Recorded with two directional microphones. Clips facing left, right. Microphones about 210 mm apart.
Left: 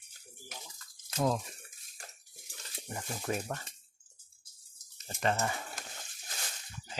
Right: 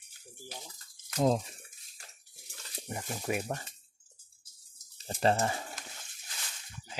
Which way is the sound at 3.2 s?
10° right (ahead or behind).